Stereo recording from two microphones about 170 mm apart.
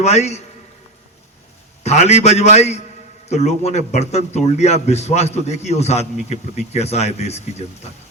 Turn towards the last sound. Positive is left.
turn(degrees=40)  # may be behind; listen again after turning